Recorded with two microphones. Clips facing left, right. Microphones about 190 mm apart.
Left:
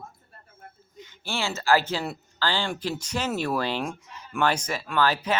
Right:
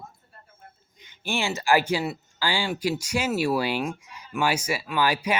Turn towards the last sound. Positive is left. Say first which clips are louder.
# even
turn(degrees=-10)  # may be behind; listen again after turning